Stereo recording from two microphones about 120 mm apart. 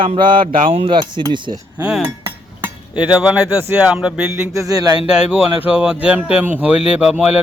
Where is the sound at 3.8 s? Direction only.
5° right (ahead or behind); by 4.9 s 30° right (ahead or behind).